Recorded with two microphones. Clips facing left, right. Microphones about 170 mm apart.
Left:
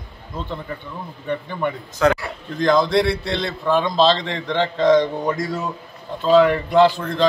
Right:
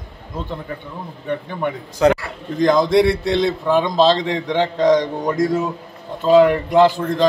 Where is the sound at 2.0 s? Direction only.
25° right (ahead or behind).